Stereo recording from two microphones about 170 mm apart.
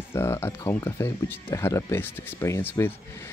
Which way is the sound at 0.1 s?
15° left (ahead or behind).